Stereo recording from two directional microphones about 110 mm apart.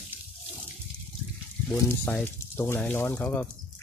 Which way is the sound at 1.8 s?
20° left (ahead or behind).